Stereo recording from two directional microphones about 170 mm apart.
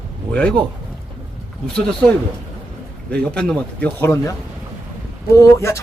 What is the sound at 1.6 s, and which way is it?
Speech, 5° left (ahead or behind).